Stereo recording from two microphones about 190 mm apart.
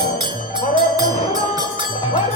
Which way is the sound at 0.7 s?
20° right (ahead or behind).